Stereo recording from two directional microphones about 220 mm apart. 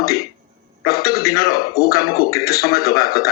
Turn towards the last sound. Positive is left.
turn(degrees=45)  # may be behind; listen again after turning